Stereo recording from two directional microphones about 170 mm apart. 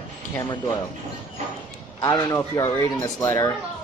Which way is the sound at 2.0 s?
25° left (ahead or behind).